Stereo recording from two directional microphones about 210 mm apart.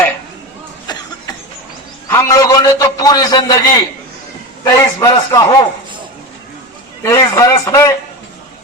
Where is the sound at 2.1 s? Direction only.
15° left (ahead or behind).